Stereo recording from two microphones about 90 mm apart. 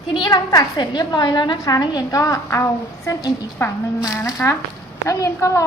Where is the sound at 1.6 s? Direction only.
50° left (ahead or behind).